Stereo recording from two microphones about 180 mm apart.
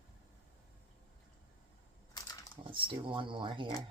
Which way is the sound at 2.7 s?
30° right (ahead or behind).